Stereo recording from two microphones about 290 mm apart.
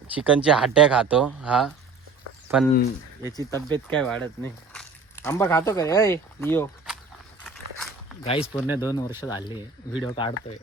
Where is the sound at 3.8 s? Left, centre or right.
Centre.